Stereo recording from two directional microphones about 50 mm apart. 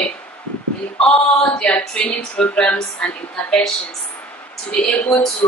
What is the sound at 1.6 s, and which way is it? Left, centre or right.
A woman's voice, left.